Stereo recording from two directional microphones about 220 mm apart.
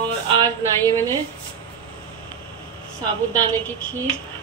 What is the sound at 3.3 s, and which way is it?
Speech, 10° left (ahead or behind).